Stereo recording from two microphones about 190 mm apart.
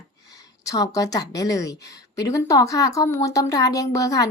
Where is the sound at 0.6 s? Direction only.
20° left (ahead or behind).